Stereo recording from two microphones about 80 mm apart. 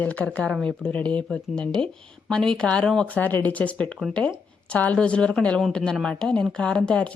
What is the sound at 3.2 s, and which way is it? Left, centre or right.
A woman's voice, centre.